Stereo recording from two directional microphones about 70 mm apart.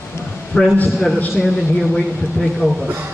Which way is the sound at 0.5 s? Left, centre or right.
Centre.